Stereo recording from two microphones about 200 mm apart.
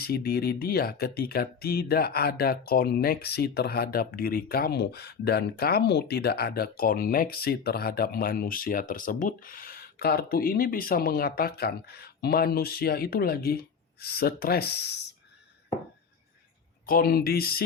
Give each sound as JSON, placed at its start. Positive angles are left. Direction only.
{"t": 0.0, "sound": "speech", "side_deg": 50}
{"t": 16.8, "sound": "speech", "side_deg": 45}